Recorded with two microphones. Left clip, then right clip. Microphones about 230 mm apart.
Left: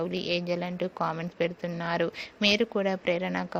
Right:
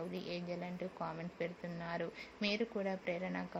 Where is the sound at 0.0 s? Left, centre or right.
Left.